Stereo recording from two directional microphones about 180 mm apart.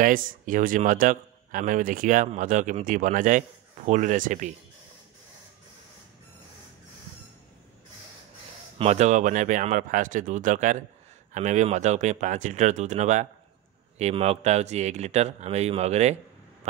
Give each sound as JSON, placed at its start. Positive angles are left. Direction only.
{"t": 0.0, "sound": "a man's voice", "side_deg": -50}
{"t": 8.7, "sound": "a man's voice", "side_deg": -35}